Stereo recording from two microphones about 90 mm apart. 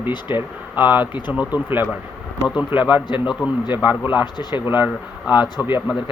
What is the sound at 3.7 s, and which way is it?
Speech, 20° right (ahead or behind).